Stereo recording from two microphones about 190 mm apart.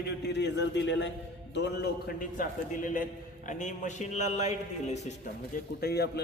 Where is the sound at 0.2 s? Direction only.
65° left (ahead or behind); by 5.1 s 35° left (ahead or behind).